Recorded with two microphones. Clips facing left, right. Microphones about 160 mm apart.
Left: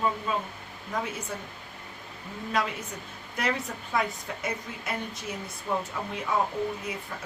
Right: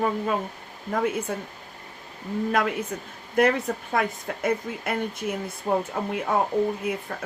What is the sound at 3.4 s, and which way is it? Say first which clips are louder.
Speech: right 9 dB; 50° right (ahead or behind).